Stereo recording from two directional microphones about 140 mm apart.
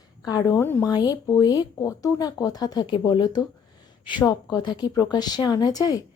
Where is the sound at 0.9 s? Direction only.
30° left (ahead or behind).